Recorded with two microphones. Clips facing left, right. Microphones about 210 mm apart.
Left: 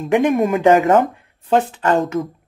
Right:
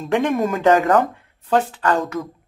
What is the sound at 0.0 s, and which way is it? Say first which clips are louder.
Speech: left 4 dB; 20° left (ahead or behind).